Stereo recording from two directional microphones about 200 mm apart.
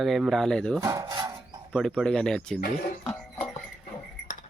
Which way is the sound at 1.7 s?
Centre (ahead or behind).